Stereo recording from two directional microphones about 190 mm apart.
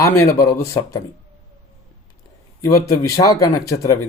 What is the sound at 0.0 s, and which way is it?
Speech, 15° left (ahead or behind).